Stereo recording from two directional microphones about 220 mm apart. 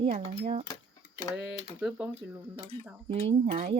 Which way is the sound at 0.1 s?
35° right (ahead or behind).